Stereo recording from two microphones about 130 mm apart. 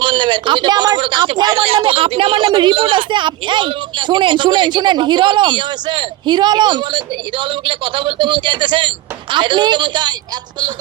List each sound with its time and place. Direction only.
0.0 s speech: 40° right (ahead or behind)